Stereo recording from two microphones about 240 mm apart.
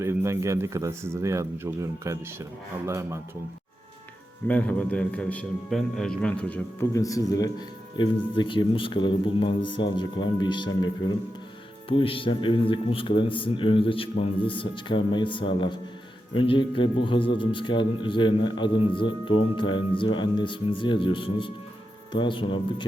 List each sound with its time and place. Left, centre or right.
0.0 s speech: centre
4.4 s a man's voice: centre